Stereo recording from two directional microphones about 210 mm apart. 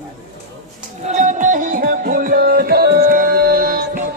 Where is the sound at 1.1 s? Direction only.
35° right (ahead or behind).